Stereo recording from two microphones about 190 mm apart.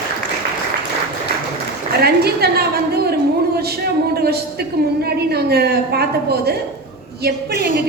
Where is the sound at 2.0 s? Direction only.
55° right (ahead or behind).